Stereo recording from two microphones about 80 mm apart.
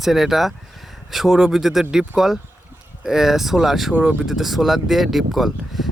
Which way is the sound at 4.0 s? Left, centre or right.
Centre.